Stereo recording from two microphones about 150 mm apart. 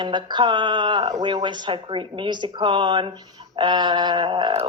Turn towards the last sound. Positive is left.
turn(degrees=-35)  # may be behind; listen again after turning